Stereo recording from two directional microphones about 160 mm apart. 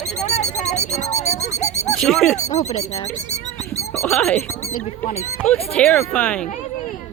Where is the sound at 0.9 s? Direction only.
45° left (ahead or behind).